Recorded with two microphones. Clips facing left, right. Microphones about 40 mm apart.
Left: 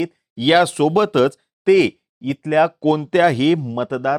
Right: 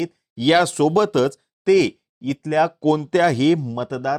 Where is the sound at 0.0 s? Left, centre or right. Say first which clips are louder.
Left 1 dB; centre.